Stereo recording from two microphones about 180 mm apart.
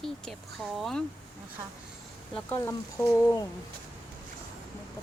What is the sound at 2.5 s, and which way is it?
Speech, 15° left (ahead or behind).